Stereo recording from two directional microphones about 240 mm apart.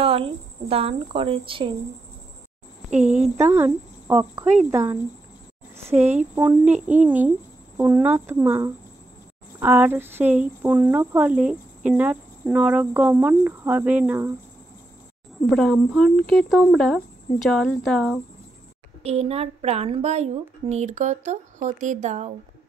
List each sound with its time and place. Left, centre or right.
0.0 s a woman's voice: right
2.9 s a woman's voice: right
3.3 s speech: centre
6.3 s speech: centre
15.5 s speech: centre
19.0 s a woman's voice: right